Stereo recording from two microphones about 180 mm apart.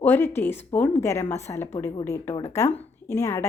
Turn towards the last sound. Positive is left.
turn(degrees=15)  # may be behind; listen again after turning